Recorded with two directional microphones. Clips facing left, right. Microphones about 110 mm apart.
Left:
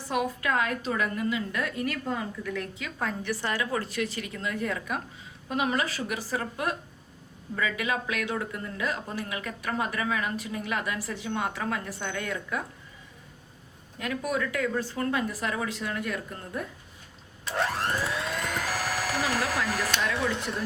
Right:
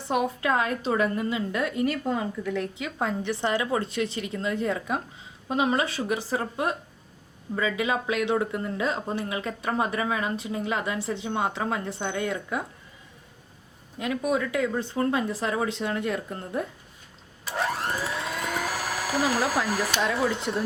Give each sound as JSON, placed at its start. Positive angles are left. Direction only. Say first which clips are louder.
{"t": 0.1, "sound": "speech", "louder": "right 3 dB", "side_deg": -25}
{"t": 14.0, "sound": "speech", "louder": "right 4 dB", "side_deg": -20}
{"t": 17.4, "sound": "a sound", "louder": "even", "side_deg": 0}
{"t": 19.6, "sound": "speech", "louder": "right 2 dB", "side_deg": 0}